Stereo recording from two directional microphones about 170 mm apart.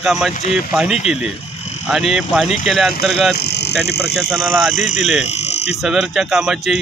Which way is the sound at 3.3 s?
80° left.